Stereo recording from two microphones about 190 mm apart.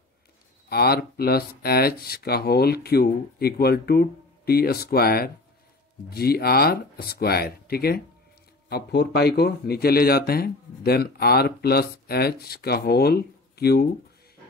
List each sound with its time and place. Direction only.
0.7 s speech: 55° left (ahead or behind)